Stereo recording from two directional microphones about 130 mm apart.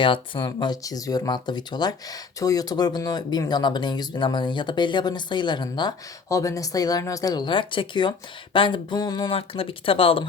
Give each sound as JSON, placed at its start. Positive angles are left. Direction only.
{"t": 0.0, "sound": "speech", "side_deg": 40}
{"t": 9.3, "sound": "speech", "side_deg": 45}